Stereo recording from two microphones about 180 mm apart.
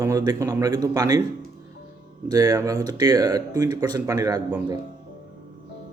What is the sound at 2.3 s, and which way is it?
Speech, 20° right (ahead or behind).